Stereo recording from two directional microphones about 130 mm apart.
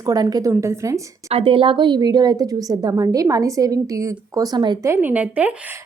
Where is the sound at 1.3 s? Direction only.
45° right (ahead or behind).